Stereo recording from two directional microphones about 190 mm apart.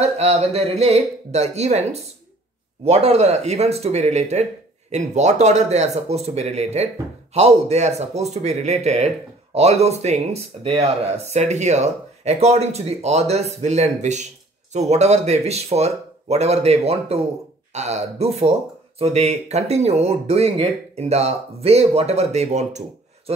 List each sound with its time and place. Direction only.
0.0 s speech: 35° right (ahead or behind)